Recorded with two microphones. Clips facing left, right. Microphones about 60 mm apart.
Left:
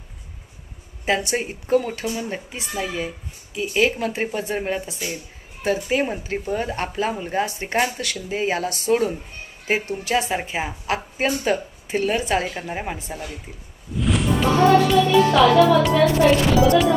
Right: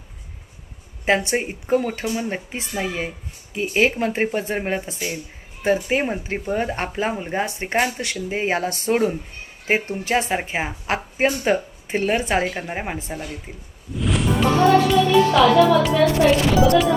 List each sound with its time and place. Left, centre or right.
1.0 s a woman's voice: right
12.5 s speech: centre
13.9 s music: centre
14.7 s a woman's voice: centre